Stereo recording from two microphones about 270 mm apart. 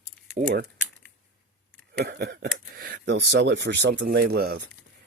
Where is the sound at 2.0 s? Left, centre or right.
Right.